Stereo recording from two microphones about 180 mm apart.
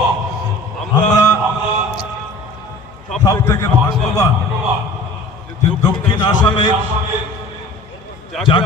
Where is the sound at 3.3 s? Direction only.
20° left (ahead or behind).